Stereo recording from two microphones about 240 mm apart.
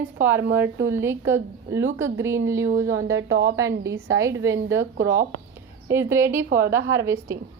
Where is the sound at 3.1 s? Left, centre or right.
Right.